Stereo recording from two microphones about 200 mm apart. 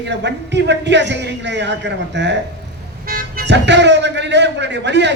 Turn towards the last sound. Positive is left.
turn(degrees=-60)  # may be behind; listen again after turning